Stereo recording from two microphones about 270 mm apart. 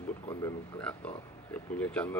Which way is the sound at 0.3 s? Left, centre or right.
Centre.